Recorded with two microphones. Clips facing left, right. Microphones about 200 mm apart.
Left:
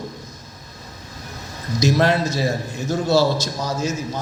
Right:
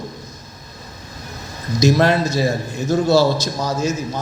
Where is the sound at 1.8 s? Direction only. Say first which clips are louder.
Right 3 dB; 45° right (ahead or behind).